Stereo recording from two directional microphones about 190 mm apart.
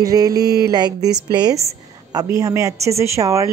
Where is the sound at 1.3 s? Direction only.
20° right (ahead or behind).